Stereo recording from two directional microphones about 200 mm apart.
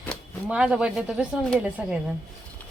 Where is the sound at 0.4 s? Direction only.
5° right (ahead or behind).